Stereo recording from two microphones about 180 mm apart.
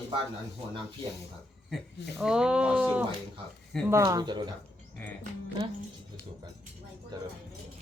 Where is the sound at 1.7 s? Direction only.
5° right (ahead or behind); by 4.4 s 25° right (ahead or behind).